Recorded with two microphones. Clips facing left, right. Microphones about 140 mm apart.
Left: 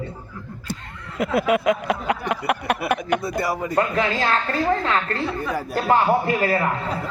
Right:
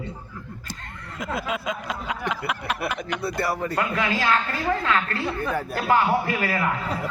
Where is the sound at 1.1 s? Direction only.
70° left (ahead or behind).